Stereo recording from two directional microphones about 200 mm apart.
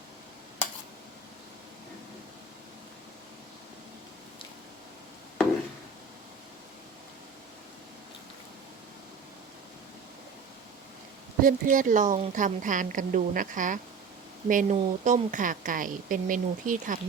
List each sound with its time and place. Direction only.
11.4 s a woman's voice: 40° right (ahead or behind)